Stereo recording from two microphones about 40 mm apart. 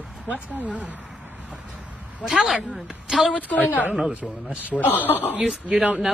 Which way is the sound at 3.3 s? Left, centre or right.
Left.